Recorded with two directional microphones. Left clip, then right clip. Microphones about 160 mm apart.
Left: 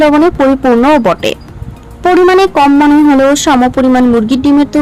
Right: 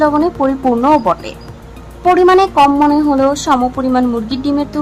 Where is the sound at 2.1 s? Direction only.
45° left (ahead or behind).